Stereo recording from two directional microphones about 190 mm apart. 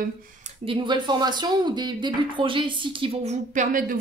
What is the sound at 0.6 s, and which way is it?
A woman's voice, 25° right (ahead or behind).